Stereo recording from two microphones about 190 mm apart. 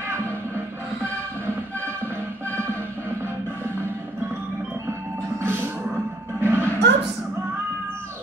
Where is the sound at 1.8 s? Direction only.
10° right (ahead or behind).